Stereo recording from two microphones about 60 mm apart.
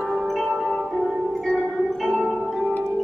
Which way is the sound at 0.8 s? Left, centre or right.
Centre.